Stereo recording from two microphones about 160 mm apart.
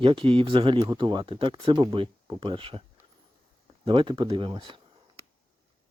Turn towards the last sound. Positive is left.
turn(degrees=-30)  # may be behind; listen again after turning